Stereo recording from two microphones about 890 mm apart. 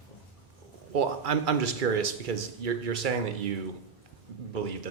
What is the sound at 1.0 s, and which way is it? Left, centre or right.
Speech, right.